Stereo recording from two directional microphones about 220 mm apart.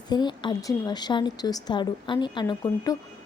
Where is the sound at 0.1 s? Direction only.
20° left (ahead or behind).